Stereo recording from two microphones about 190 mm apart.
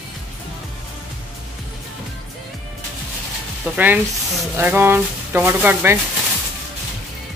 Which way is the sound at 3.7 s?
10° right (ahead or behind).